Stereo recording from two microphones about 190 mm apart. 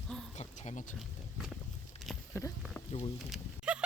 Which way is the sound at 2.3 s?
15° left (ahead or behind).